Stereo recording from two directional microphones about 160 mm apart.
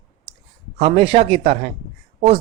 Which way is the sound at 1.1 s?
40° right (ahead or behind).